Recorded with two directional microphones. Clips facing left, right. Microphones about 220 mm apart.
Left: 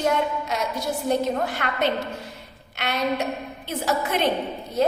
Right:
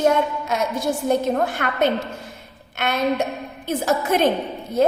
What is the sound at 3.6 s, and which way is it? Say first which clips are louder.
Speech: right 5 dB; 45° right (ahead or behind).